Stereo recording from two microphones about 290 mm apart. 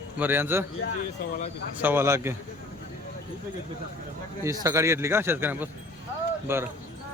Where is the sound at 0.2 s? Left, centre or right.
Centre.